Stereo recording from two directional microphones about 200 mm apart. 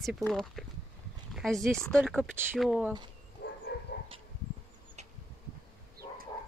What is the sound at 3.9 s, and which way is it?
Dog, 55° left (ahead or behind).